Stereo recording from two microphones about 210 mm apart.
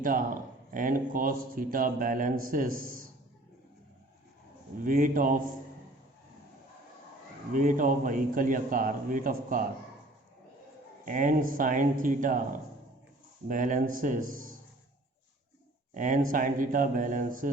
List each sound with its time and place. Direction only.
0.0 s a man's voice: 40° right (ahead or behind)
4.8 s a man's voice: 40° right (ahead or behind)
7.5 s a man's voice: 40° right (ahead or behind)
11.0 s a man's voice: 40° right (ahead or behind)
13.5 s a man's voice: 40° right (ahead or behind)
16.0 s a man's voice: 40° right (ahead or behind)